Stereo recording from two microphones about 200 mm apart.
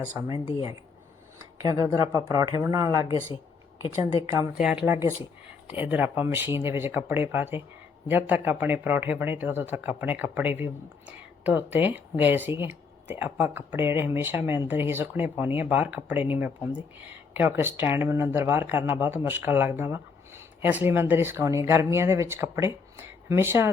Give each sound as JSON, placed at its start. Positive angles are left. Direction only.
{"t": 0.1, "sound": "speech", "side_deg": -10}
{"t": 0.3, "sound": "speech", "side_deg": 30}
{"t": 1.6, "sound": "speech", "side_deg": -15}